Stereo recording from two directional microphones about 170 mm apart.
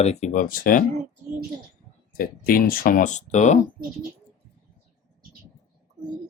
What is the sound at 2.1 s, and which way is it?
Speech, 55° left (ahead or behind).